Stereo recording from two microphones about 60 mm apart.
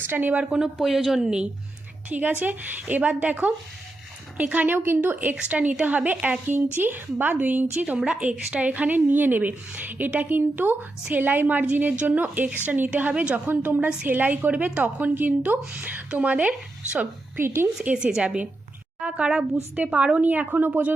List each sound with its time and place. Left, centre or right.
0.1 s a woman's voice: right
0.8 s speech: centre
2.0 s a woman's voice: right
7.9 s speech: centre
17.3 s a woman's voice: right
17.9 s a woman's voice: centre; by 20.9 s right